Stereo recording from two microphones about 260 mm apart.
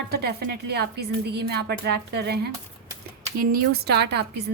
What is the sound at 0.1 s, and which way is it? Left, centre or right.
A woman's voice, right.